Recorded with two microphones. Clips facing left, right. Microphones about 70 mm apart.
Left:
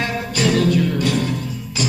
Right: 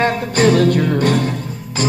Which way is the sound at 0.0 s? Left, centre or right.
Right.